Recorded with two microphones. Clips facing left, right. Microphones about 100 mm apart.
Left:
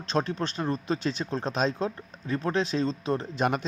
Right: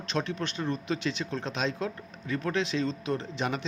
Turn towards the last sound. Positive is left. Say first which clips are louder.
# left 3 dB
turn(degrees=35)  # may be behind; listen again after turning